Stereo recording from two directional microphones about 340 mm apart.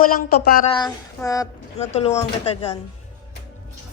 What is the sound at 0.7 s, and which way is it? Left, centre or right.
Speech, centre.